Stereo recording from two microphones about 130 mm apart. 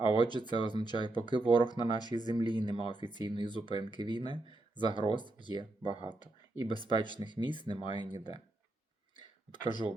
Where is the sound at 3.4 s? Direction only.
35° left (ahead or behind).